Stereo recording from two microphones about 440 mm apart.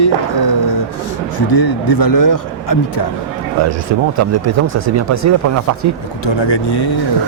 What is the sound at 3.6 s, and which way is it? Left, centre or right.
Speech, right.